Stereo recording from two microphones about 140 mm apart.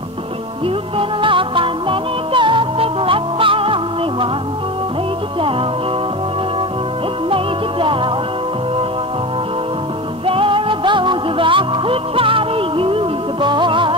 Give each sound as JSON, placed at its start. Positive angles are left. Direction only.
{"t": 0.9, "sound": "music", "side_deg": -35}
{"t": 7.2, "sound": "music", "side_deg": -40}
{"t": 10.2, "sound": "music", "side_deg": -40}